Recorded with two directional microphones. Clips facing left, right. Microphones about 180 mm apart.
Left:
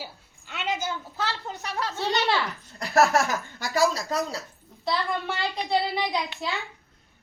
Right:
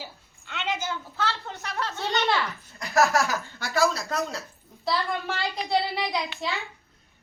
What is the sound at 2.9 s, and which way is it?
Laughter, 60° left (ahead or behind).